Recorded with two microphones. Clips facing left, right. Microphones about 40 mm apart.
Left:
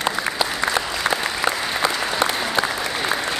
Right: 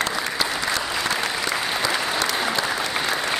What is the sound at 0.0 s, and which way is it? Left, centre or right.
Applause, centre.